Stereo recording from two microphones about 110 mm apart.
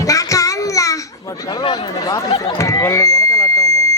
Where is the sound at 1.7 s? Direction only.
35° left (ahead or behind).